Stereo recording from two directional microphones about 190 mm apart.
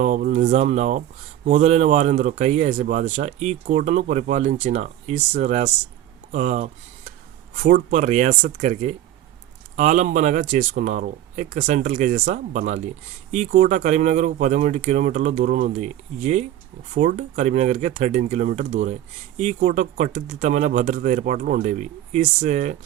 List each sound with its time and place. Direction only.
0.0 s speech: 40° right (ahead or behind)